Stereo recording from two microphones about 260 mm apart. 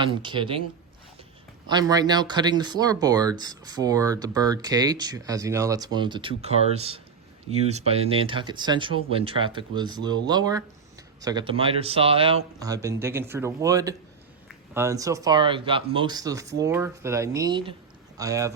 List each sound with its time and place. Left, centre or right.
0.0 s speech: centre
1.6 s speech: centre